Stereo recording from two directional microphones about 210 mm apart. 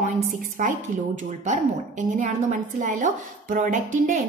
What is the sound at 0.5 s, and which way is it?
A woman's voice, 35° right (ahead or behind).